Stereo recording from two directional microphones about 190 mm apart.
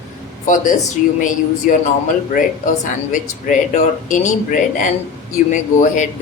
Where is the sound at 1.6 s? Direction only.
45° left (ahead or behind).